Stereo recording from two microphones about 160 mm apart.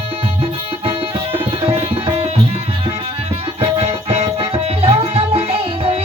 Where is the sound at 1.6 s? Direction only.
40° right (ahead or behind).